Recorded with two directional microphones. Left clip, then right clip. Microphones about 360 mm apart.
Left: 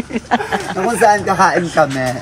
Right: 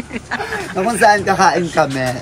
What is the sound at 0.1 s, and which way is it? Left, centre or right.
Speech, centre.